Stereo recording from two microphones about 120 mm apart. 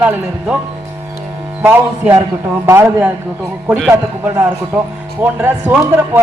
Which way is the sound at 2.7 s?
20° right (ahead or behind).